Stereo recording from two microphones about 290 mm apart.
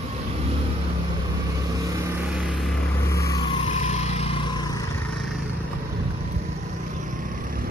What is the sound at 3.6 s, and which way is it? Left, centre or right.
Vehicle, left.